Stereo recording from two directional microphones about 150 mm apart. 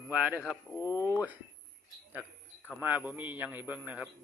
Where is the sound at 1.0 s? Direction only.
15° right (ahead or behind).